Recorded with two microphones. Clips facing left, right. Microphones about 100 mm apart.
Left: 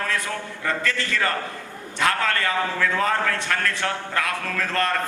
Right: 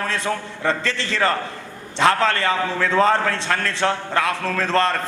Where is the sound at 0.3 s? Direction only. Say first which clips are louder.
Right 5 dB; 30° right (ahead or behind).